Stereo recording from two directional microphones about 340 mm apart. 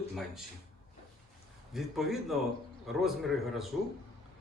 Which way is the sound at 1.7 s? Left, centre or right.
Centre.